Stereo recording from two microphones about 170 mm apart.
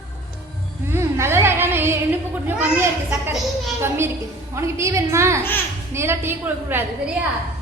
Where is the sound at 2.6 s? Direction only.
10° right (ahead or behind).